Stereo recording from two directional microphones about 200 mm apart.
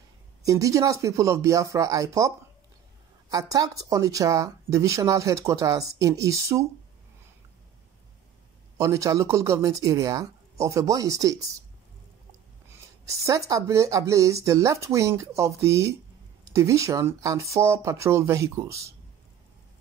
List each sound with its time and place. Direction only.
0.4 s speech: 15° right (ahead or behind)
8.7 s speech: 15° right (ahead or behind)
12.6 s speech: 15° right (ahead or behind)